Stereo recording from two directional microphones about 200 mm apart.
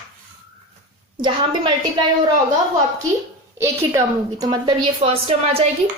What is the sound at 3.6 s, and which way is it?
A woman's voice, 15° right (ahead or behind).